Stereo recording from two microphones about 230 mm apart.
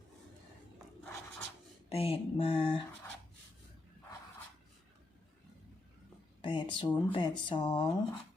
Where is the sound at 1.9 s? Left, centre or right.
Left.